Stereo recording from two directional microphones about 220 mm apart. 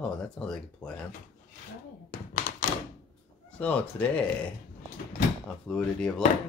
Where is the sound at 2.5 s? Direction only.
35° left (ahead or behind).